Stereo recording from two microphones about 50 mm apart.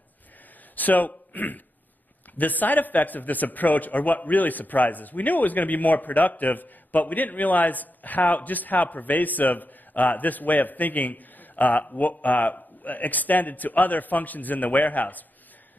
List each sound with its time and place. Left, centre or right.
0.7 s a man's voice: left